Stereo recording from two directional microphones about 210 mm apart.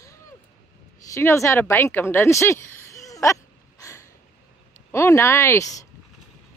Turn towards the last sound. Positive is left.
turn(degrees=15)  # may be behind; listen again after turning